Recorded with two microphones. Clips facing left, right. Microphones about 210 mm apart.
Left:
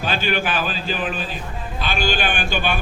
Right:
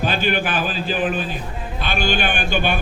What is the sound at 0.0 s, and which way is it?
A man's voice, 45° right (ahead or behind).